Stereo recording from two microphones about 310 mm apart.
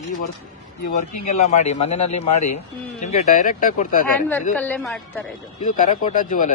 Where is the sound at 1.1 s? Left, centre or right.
Left.